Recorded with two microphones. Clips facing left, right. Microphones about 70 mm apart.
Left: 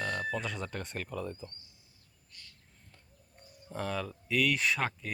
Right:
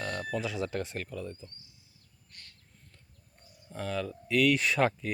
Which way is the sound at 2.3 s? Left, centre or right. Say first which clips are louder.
Right 2 dB; right.